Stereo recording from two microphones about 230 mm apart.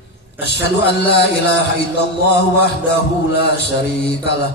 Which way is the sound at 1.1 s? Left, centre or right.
Left.